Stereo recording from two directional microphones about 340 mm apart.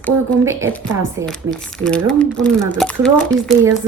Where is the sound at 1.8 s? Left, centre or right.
Centre.